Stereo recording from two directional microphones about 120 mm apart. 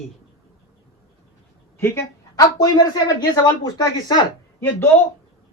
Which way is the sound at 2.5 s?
30° left (ahead or behind).